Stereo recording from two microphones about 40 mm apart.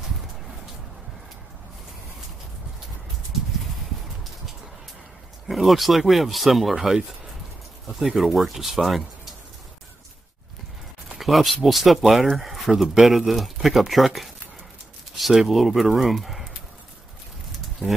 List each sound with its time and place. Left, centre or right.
5.5 s speech: centre
11.1 s speech: centre
17.8 s speech: right